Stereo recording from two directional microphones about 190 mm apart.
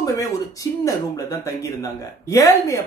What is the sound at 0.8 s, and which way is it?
Speech, 15° left (ahead or behind).